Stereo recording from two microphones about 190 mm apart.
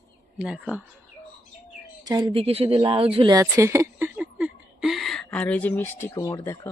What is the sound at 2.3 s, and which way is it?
Speech, 30° right (ahead or behind).